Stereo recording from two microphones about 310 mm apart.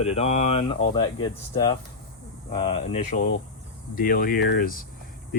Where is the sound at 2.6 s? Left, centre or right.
Left.